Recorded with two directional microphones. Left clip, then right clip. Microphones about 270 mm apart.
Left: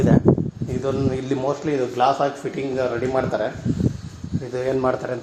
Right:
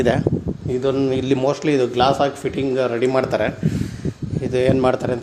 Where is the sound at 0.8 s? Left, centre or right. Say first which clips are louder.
Right 4 dB; right.